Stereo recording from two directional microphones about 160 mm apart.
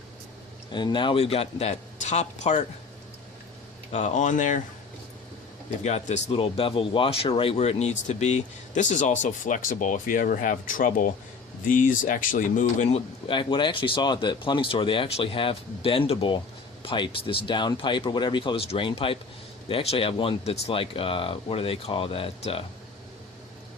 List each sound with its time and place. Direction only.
0.7 s speech: 30° left (ahead or behind); by 2.6 s 45° left (ahead or behind)
3.9 s speech: 50° left (ahead or behind)
5.8 s speech: 45° left (ahead or behind)
13.2 s speech: 30° left (ahead or behind)